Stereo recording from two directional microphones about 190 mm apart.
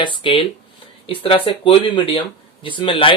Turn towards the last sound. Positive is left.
turn(degrees=25)  # may be behind; listen again after turning